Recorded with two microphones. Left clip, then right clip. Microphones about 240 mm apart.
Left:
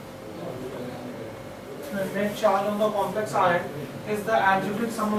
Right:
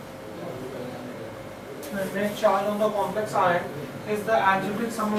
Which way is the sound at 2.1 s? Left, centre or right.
Centre.